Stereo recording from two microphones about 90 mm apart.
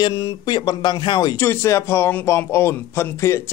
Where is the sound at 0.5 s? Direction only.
55° left (ahead or behind).